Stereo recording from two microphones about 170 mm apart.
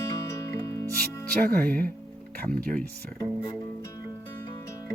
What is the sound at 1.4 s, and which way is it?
Music, 60° right (ahead or behind).